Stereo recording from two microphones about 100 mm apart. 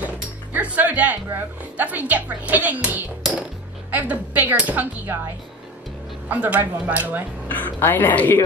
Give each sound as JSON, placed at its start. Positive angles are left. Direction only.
{"t": 0.0, "sound": "music", "side_deg": -15}
{"t": 1.8, "sound": "speech", "side_deg": -15}
{"t": 7.4, "sound": "speech", "side_deg": 15}